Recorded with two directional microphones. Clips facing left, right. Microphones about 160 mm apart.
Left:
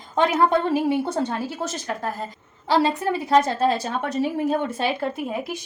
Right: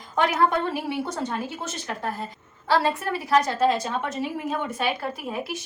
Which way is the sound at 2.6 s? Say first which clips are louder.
Left 3 dB; 20° left (ahead or behind).